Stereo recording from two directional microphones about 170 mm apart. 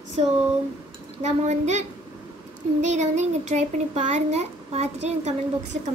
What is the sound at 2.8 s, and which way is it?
A child's voice, 40° right (ahead or behind).